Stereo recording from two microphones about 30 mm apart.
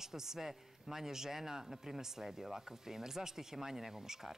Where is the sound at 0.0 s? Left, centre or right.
Centre.